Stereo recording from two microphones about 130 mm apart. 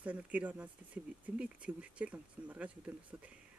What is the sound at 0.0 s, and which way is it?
Speech, 10° right (ahead or behind).